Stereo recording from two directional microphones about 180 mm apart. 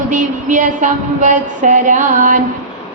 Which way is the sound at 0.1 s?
45° right (ahead or behind).